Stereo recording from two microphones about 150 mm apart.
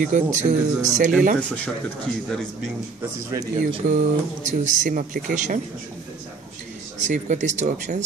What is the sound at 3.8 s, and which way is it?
Speech, 55° right (ahead or behind).